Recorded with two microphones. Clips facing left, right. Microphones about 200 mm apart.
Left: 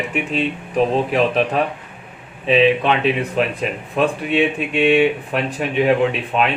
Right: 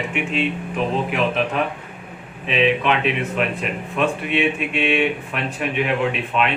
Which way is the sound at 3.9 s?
35° left (ahead or behind).